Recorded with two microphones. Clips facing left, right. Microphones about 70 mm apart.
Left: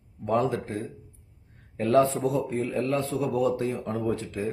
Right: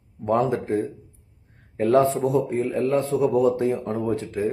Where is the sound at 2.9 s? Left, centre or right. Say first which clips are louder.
Right 6 dB; right.